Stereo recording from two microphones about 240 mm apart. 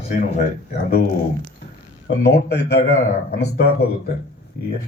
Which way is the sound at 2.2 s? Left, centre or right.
Left.